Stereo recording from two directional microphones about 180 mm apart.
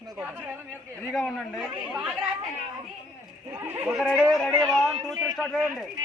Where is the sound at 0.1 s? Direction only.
10° right (ahead or behind).